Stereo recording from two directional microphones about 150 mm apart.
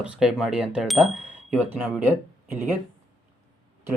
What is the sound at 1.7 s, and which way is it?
Speech, 10° right (ahead or behind).